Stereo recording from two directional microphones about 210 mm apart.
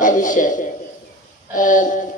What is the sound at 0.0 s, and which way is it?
A man's voice, 40° left (ahead or behind).